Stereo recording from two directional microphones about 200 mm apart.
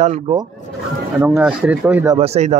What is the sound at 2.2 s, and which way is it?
Speech, 35° right (ahead or behind).